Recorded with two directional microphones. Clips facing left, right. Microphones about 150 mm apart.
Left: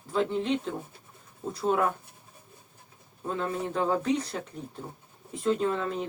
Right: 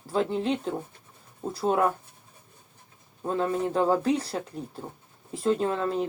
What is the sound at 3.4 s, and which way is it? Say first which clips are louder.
Speech: right 5 dB; 35° right (ahead or behind).